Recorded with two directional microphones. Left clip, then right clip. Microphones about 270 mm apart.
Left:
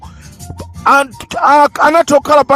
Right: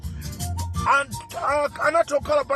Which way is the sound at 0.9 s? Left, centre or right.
Left.